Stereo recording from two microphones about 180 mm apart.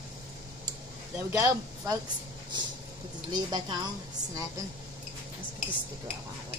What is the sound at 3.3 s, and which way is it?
Speech, 20° right (ahead or behind).